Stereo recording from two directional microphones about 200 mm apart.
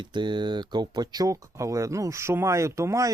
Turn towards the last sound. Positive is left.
turn(degrees=-15)  # may be behind; listen again after turning